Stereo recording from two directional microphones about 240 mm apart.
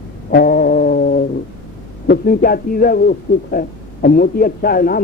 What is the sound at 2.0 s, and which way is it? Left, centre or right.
A man's voice, left.